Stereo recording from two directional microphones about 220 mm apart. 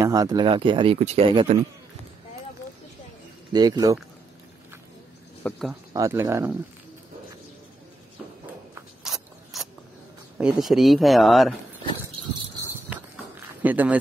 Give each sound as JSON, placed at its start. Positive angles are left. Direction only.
{"t": 0.0, "sound": "speech", "side_deg": -15}
{"t": 3.5, "sound": "speech", "side_deg": -15}
{"t": 5.4, "sound": "speech", "side_deg": 0}
{"t": 5.9, "sound": "speech", "side_deg": -15}
{"t": 8.7, "sound": "zipper", "side_deg": 0}
{"t": 10.3, "sound": "speech", "side_deg": 0}
{"t": 12.9, "sound": "run", "side_deg": -5}